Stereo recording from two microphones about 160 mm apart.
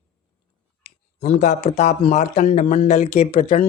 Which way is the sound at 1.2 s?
45° left (ahead or behind).